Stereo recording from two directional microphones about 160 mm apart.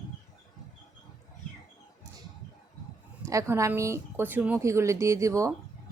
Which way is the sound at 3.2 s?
20° right (ahead or behind).